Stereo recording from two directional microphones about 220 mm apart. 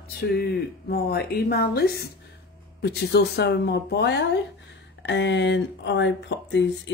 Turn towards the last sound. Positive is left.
turn(degrees=55)  # may be behind; listen again after turning